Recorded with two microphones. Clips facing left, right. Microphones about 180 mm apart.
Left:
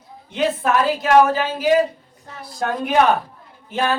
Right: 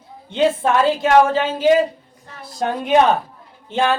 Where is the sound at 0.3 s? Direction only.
30° right (ahead or behind).